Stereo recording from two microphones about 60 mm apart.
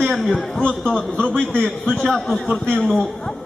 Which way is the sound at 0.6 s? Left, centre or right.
Centre.